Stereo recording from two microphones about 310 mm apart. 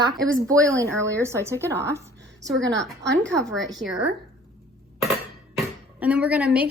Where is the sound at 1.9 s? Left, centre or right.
Centre.